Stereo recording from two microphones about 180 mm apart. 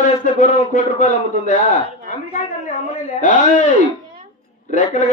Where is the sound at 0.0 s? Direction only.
45° left (ahead or behind).